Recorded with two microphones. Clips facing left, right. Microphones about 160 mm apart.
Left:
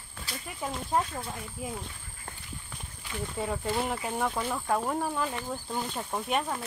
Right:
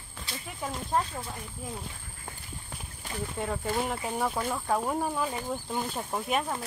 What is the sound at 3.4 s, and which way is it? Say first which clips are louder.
Speech: even; centre (ahead or behind).